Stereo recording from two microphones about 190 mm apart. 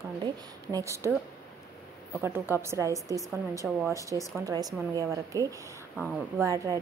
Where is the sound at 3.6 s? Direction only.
Centre (ahead or behind).